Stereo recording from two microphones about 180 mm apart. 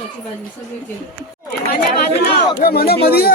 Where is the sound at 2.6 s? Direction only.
55° left (ahead or behind).